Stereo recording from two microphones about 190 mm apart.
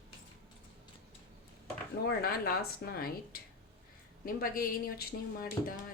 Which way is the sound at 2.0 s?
55° left (ahead or behind).